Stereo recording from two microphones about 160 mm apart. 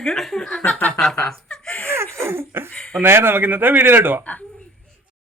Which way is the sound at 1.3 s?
5° left (ahead or behind).